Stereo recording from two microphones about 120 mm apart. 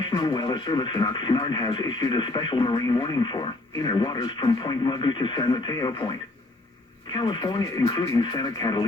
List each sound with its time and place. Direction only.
0.0 s speech: 35° left (ahead or behind)